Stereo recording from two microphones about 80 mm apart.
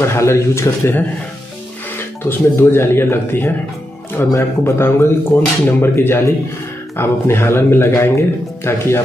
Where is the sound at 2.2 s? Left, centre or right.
Left.